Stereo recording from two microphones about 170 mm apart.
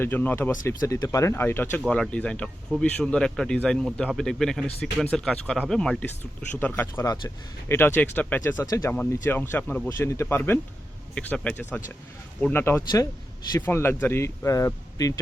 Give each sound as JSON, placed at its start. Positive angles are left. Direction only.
{"t": 0.0, "sound": "speech", "side_deg": 10}